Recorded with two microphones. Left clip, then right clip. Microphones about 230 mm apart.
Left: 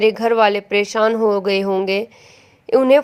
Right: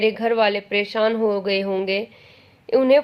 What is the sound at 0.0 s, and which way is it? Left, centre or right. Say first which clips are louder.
Speech: left 4 dB; left.